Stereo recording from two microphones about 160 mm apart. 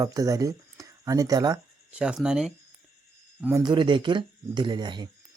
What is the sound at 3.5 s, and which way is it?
Speech, 30° right (ahead or behind).